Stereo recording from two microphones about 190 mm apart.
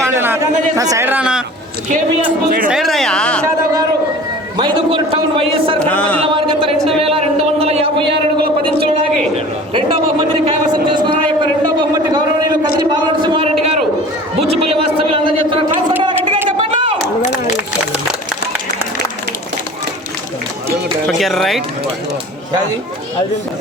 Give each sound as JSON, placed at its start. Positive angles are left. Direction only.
{"t": 0.0, "sound": "a man's voice", "side_deg": -15}
{"t": 2.6, "sound": "speech", "side_deg": 0}
{"t": 4.5, "sound": "a man's voice", "side_deg": -25}
{"t": 5.9, "sound": "speech", "side_deg": 5}
{"t": 7.6, "sound": "a man's voice", "side_deg": -30}
{"t": 9.3, "sound": "a sound", "side_deg": -30}
{"t": 14.5, "sound": "a sound", "side_deg": -30}
{"t": 21.1, "sound": "speech", "side_deg": 0}